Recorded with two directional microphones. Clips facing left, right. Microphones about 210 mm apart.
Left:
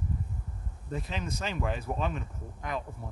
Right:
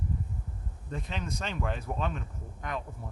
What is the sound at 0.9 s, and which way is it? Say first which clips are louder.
Speech: left 1 dB; 5° left (ahead or behind).